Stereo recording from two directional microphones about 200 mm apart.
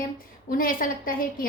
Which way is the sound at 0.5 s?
45° left (ahead or behind).